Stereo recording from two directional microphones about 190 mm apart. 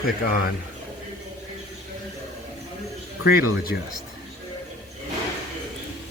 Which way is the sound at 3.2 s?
55° left (ahead or behind).